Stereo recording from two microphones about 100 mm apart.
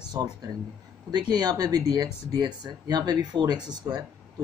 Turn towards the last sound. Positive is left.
turn(degrees=-45)  # may be behind; listen again after turning